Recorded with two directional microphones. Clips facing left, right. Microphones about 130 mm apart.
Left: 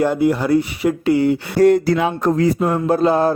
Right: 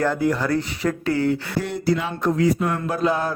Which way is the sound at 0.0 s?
15° left (ahead or behind).